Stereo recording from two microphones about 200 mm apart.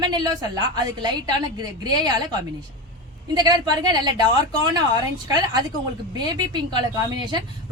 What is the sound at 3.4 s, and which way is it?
A woman's voice, 20° right (ahead or behind).